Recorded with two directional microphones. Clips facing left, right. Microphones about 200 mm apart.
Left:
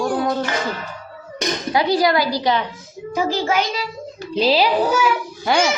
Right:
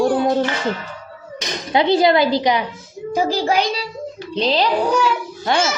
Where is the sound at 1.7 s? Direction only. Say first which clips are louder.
Right 4 dB; 25° right (ahead or behind).